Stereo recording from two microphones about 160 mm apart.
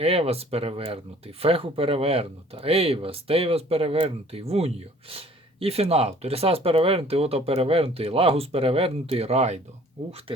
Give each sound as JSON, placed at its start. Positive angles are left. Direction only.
{"t": 0.0, "sound": "speech", "side_deg": -40}